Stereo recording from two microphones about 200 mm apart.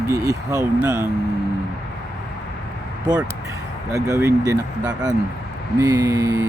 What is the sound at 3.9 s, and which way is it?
Speech, 15° right (ahead or behind).